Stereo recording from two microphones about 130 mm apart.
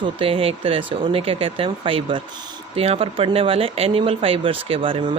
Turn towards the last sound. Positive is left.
turn(degrees=-45)  # may be behind; listen again after turning